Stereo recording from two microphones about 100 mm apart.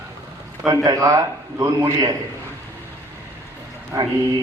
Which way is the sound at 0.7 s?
35° right (ahead or behind).